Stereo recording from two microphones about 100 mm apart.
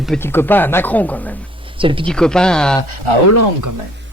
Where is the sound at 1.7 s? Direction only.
60° right (ahead or behind).